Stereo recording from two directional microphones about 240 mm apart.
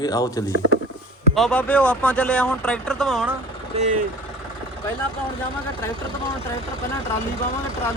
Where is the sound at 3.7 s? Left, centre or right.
Right.